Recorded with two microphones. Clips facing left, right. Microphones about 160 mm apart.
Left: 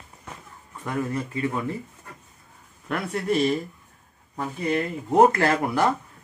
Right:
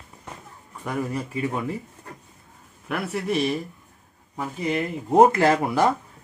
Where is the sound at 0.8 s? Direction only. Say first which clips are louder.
Even; 10° right (ahead or behind).